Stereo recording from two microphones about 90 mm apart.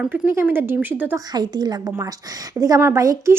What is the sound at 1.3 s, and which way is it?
Speech, 50° right (ahead or behind).